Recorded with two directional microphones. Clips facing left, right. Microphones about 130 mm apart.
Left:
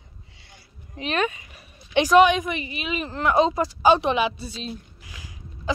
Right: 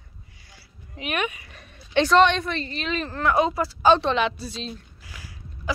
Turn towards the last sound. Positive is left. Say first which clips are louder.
# left 2 dB
turn(degrees=20)  # may be behind; listen again after turning